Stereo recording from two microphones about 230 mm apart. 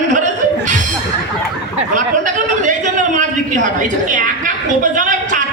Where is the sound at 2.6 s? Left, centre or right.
Right.